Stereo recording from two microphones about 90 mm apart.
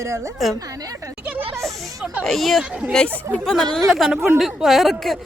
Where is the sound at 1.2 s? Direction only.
20° right (ahead or behind).